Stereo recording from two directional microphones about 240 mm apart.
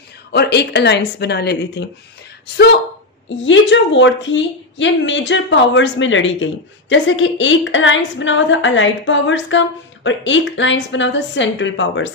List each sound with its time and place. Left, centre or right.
0.3 s a woman's voice: left